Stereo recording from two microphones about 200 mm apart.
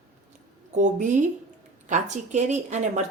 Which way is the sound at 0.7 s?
40° right (ahead or behind).